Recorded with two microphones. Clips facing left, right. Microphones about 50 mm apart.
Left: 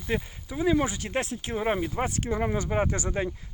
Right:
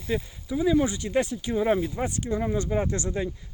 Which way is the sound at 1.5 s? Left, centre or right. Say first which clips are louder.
Right 3 dB; left.